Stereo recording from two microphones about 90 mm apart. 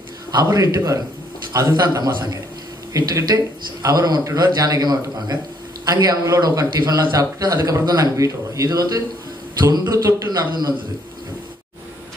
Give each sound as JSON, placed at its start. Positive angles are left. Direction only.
{"t": 0.3, "sound": "a man's voice", "side_deg": -45}